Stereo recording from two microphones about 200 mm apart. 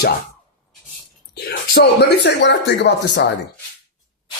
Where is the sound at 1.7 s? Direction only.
55° left (ahead or behind).